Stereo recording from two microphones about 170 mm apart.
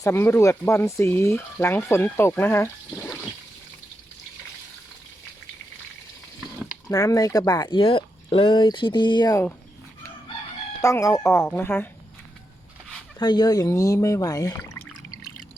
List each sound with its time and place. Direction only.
0.0 s speech: 15° left (ahead or behind)
6.6 s a sound: 5° right (ahead or behind)
6.9 s speech: 20° left (ahead or behind)
10.8 s speech: 20° left (ahead or behind)
13.1 s speech: 25° left (ahead or behind)